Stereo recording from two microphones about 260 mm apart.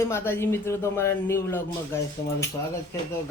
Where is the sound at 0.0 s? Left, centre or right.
Centre.